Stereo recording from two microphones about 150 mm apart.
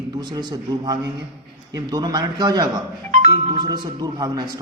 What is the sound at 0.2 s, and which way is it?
A man's voice, 30° right (ahead or behind).